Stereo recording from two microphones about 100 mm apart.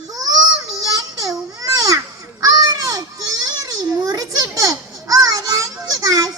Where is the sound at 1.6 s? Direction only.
35° right (ahead or behind).